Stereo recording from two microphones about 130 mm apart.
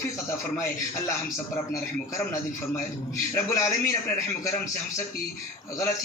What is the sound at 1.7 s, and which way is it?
A man's voice, 25° left (ahead or behind).